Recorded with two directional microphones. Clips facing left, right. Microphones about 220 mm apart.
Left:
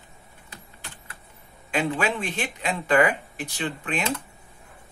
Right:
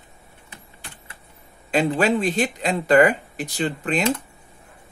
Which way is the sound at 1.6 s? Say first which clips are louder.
Right 6 dB; 35° right (ahead or behind).